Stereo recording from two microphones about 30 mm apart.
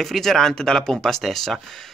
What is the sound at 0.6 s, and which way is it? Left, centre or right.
Speech, left.